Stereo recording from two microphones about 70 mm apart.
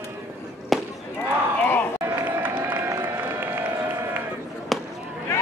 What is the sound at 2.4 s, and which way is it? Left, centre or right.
Run, right.